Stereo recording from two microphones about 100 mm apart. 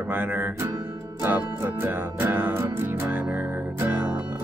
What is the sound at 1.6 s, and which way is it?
Music, 20° right (ahead or behind).